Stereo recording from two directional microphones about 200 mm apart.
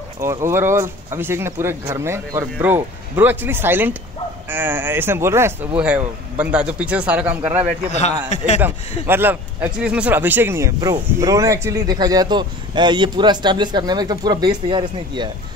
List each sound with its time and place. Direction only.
0.2 s speech: 15° right (ahead or behind)
7.9 s a man's voice: 35° left (ahead or behind)
9.0 s a man's voice: 10° right (ahead or behind)